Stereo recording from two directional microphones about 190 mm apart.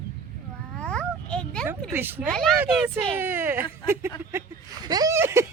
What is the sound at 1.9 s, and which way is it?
Speech, 10° right (ahead or behind).